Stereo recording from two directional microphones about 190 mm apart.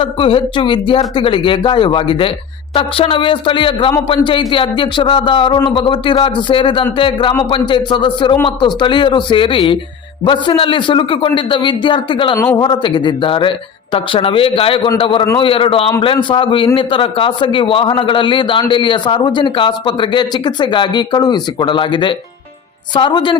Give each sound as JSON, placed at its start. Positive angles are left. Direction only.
{"t": 0.0, "sound": "a man's voice", "side_deg": 30}